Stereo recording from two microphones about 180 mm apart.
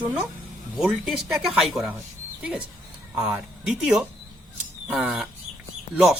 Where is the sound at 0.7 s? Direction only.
5° right (ahead or behind).